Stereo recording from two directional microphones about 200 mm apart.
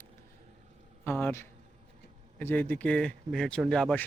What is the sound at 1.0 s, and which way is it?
A man's voice, 10° left (ahead or behind).